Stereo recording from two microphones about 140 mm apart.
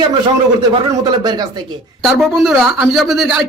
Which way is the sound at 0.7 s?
30° right (ahead or behind).